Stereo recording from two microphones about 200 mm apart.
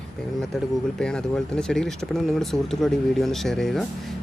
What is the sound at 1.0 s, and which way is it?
Speech, 5° left (ahead or behind).